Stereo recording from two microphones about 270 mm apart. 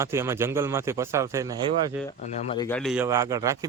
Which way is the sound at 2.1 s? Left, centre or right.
Left.